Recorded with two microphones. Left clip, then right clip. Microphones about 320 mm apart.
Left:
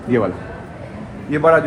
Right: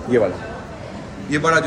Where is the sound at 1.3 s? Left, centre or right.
Centre.